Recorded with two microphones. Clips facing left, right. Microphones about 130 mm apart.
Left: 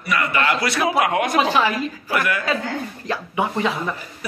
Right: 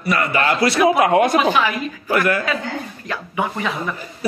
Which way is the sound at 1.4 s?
30° left (ahead or behind).